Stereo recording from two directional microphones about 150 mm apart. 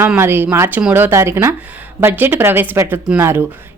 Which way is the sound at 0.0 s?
15° right (ahead or behind).